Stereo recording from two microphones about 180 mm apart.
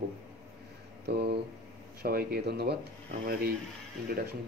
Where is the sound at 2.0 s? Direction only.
60° right (ahead or behind).